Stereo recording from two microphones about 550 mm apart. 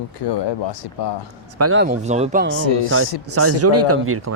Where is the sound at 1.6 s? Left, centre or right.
Right.